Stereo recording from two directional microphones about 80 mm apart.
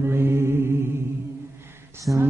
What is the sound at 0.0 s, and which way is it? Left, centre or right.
Music, right.